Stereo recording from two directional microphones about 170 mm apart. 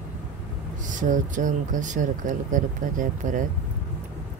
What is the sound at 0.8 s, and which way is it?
Speech, 50° right (ahead or behind).